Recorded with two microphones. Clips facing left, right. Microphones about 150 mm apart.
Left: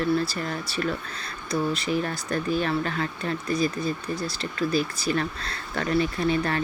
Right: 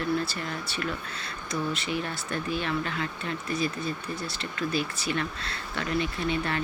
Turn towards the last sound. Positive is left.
turn(degrees=40)  # may be behind; listen again after turning